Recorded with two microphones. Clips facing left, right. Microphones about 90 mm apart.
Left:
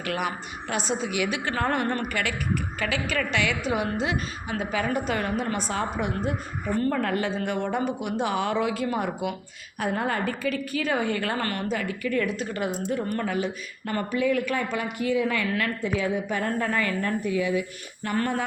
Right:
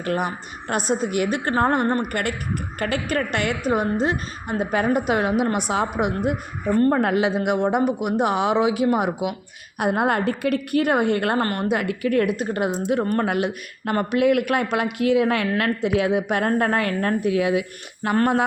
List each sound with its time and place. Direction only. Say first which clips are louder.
0.7 s a woman's voice: right 5 dB; 50° right (ahead or behind)
4.9 s a woman's voice: right 6 dB; 60° right (ahead or behind); by 7.3 s 90° right
7.4 s a woman's voice: right 6 dB; 75° right (ahead or behind)
9.7 s a woman's voice: right 6 dB; 65° right (ahead or behind)
11.3 s a woman's voice: right 6 dB; 40° right (ahead or behind)
11.7 s a woman's voice: right 6 dB; 70° right (ahead or behind)
16.6 s a woman's voice: right 5 dB; 65° right (ahead or behind); by 18.2 s 90° right